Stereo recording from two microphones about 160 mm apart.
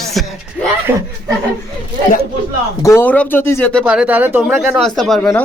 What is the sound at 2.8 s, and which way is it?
Speech, 15° left (ahead or behind).